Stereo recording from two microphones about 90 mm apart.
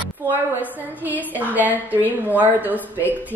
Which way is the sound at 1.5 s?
20° right (ahead or behind).